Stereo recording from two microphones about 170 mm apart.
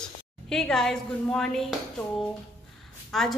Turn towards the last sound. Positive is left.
turn(degrees=0)  # may be behind; listen again after turning